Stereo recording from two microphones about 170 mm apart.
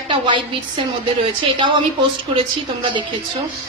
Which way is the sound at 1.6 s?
30° right (ahead or behind).